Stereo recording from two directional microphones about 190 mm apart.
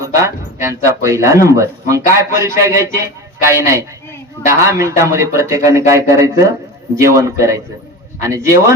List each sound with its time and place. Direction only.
0.0 s speech: 15° right (ahead or behind)